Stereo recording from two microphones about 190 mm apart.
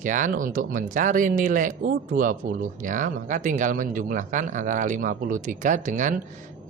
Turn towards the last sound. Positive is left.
turn(degrees=-40)  # may be behind; listen again after turning